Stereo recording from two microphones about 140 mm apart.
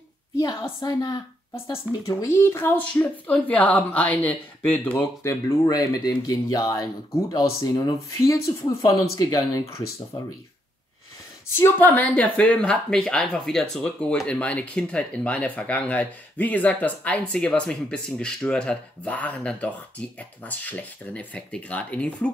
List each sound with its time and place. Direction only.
0.4 s a woman's voice: 30° left (ahead or behind)
11.4 s speech: 15° left (ahead or behind)